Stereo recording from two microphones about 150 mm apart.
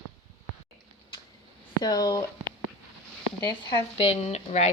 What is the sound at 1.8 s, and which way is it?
Speech, 25° left (ahead or behind).